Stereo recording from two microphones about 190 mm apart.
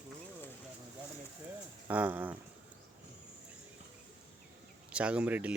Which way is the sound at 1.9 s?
10° right (ahead or behind).